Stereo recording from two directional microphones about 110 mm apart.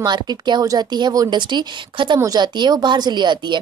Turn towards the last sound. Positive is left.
turn(degrees=-40)  # may be behind; listen again after turning